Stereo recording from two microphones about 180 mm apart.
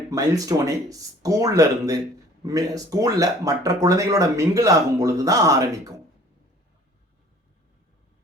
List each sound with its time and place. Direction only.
0.1 s speech: 20° right (ahead or behind)